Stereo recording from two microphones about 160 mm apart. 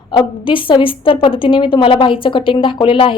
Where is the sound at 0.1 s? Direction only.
30° left (ahead or behind).